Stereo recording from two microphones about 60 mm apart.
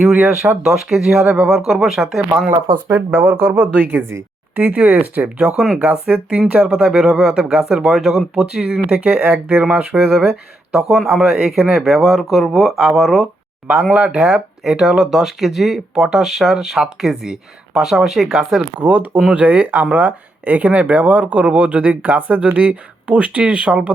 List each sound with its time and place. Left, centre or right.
0.0 s speech: centre
2.9 s speech: right
4.5 s speech: right; by 13.2 s centre
13.9 s speech: centre
18.8 s speech: right